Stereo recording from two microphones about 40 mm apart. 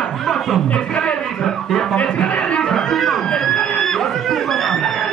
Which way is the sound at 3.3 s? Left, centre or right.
Centre.